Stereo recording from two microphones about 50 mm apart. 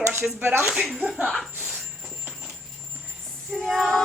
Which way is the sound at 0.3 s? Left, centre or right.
Right.